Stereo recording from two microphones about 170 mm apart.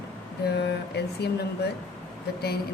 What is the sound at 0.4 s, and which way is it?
Speech, 75° left (ahead or behind).